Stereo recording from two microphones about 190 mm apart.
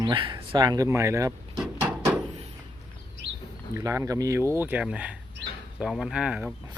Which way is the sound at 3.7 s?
15° right (ahead or behind).